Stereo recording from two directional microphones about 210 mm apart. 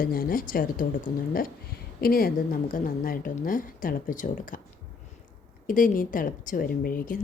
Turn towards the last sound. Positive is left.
turn(degrees=40)  # may be behind; listen again after turning